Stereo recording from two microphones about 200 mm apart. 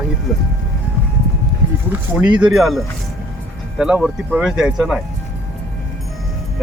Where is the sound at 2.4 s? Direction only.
Centre (ahead or behind).